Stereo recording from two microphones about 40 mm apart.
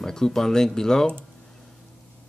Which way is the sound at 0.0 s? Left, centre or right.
Centre.